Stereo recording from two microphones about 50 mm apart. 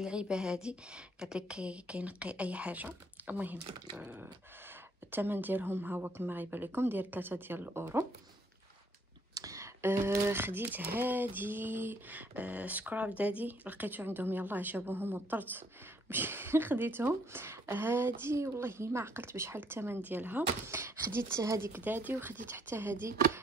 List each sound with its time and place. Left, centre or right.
0.0 s a woman's voice: centre; by 3.5 s right
4.0 s speech: right
9.8 s a woman's voice: right
20.0 s a woman's voice: right
20.6 s speech: right
21.7 s speech: right